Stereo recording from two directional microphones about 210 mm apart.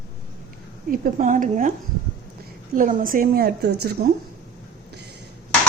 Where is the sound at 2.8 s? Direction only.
40° right (ahead or behind).